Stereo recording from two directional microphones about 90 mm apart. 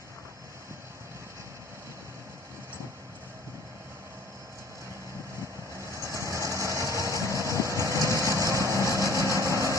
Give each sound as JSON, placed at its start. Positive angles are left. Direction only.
{"t": 5.7, "sound": "vehicle", "side_deg": -35}